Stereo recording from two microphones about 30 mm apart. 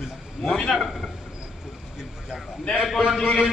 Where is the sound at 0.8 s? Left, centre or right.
Centre.